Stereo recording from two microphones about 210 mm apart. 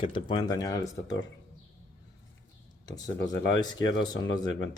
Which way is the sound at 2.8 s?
20° left (ahead or behind).